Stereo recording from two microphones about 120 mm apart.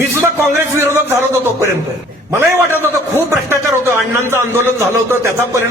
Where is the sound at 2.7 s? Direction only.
20° right (ahead or behind).